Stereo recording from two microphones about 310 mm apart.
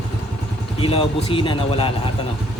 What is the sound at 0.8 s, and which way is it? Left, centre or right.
Speech, centre.